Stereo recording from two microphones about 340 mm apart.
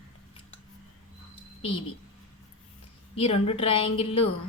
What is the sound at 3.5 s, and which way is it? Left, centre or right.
Speech, centre.